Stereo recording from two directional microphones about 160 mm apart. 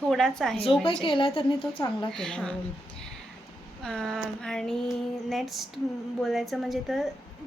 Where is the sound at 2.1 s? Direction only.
5° left (ahead or behind).